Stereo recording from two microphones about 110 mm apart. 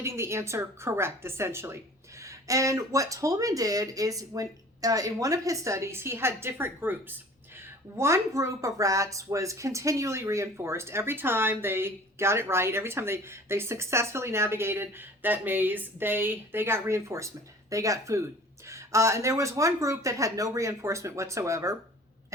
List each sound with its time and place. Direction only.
0.0 s a woman's voice: 25° right (ahead or behind)